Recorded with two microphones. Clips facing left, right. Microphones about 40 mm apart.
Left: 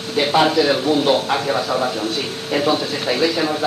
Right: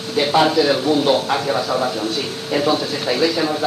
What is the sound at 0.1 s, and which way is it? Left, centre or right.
Speech, left.